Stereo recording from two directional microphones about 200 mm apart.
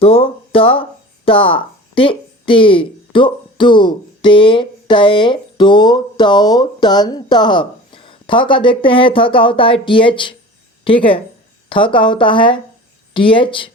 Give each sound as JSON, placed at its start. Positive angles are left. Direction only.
{"t": 0.0, "sound": "speech", "side_deg": 30}